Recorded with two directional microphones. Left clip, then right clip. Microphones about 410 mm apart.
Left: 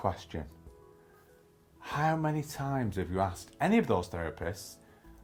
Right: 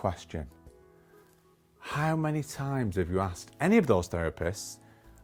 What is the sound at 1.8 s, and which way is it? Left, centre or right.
Speech, right.